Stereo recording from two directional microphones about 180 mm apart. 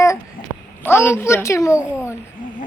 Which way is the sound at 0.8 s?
10° left (ahead or behind).